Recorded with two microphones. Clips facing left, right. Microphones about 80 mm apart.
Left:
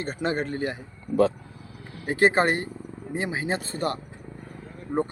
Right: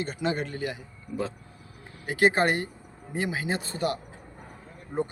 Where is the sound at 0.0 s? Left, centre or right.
Left.